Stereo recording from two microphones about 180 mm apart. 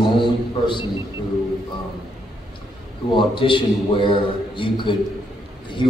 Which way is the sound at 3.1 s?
30° left (ahead or behind).